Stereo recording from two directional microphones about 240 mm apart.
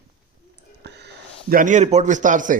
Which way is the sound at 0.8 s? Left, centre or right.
Right.